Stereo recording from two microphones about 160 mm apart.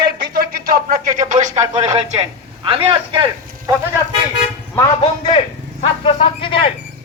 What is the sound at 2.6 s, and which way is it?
Speech, 35° right (ahead or behind).